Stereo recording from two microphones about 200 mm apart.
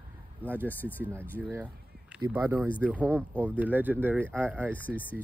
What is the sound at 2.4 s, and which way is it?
Speech, 15° right (ahead or behind).